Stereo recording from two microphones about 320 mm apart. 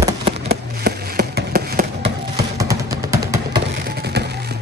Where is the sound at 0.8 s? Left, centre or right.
Right.